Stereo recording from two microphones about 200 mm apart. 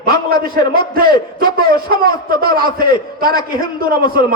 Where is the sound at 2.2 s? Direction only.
50° right (ahead or behind).